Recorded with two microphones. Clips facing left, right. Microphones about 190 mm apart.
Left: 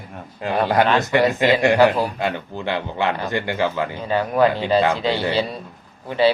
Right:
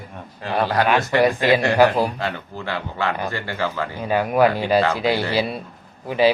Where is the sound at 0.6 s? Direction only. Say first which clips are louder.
Left 1 dB; 20° left (ahead or behind).